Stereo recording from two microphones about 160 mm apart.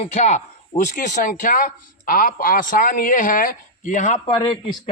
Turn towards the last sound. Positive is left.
turn(degrees=30)  # may be behind; listen again after turning